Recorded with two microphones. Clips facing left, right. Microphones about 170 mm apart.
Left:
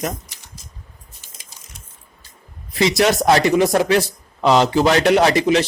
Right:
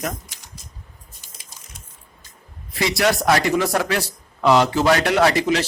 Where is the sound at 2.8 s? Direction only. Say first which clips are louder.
Left 4 dB; 20° left (ahead or behind).